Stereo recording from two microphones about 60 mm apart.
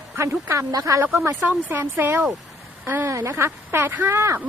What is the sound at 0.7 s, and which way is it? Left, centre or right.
Speech, right.